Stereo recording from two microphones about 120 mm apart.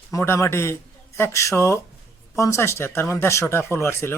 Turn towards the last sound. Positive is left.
turn(degrees=20)  # may be behind; listen again after turning